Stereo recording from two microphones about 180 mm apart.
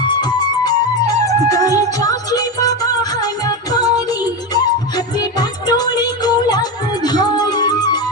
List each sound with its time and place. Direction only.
0.1 s music: 25° left (ahead or behind)